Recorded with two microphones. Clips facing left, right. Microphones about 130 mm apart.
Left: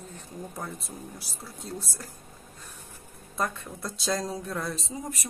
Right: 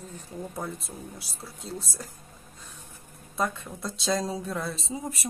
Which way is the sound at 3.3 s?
Centre (ahead or behind).